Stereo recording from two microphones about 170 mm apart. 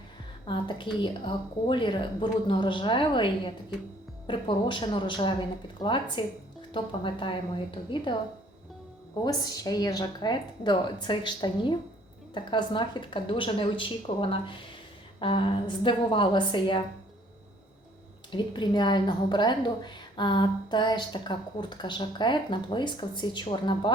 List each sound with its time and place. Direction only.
0.4 s a woman's voice: 30° left (ahead or behind)
9.2 s a woman's voice: 20° left (ahead or behind)
18.3 s a woman's voice: 25° left (ahead or behind)